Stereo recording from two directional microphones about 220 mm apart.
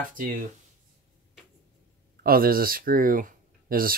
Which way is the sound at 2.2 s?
40° right (ahead or behind).